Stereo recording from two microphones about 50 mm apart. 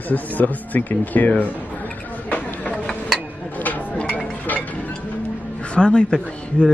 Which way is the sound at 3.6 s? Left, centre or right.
Left.